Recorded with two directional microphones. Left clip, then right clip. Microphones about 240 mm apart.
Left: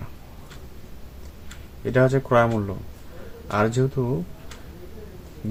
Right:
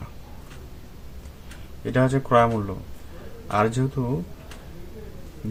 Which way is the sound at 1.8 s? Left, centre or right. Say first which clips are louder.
Left 3 dB; centre.